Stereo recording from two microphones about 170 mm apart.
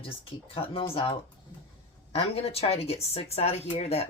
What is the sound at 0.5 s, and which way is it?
Speech, 35° left (ahead or behind).